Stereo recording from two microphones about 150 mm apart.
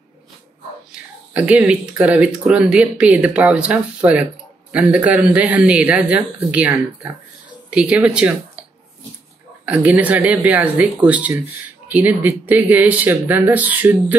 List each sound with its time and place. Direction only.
1.3 s speech: 5° right (ahead or behind)
9.7 s speech: 10° right (ahead or behind)